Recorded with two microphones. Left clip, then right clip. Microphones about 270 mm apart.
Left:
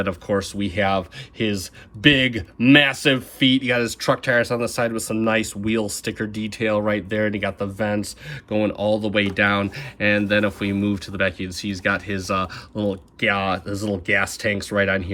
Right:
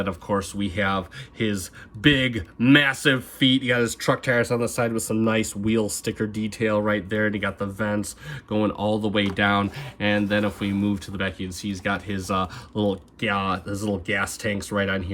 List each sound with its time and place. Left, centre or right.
0.0 s speech: centre
2.1 s speech: right
2.7 s speech: centre